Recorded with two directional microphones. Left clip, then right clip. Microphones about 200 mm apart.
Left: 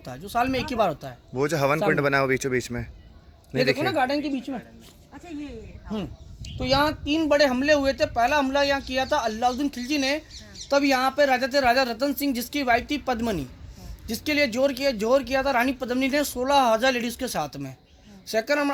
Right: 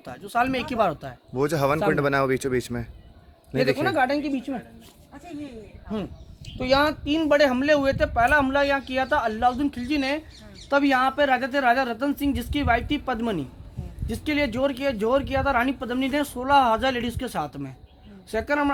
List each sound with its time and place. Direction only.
0.0 s speech: 30° left (ahead or behind)
1.3 s speech: centre (ahead or behind)
3.9 s speech: 20° left (ahead or behind)
6.6 s speech: 10° left (ahead or behind); by 18.7 s 45° left (ahead or behind)